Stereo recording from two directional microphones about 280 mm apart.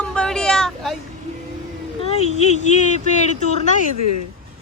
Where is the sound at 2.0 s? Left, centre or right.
Left.